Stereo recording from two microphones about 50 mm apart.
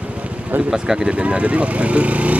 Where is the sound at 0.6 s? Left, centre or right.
Centre.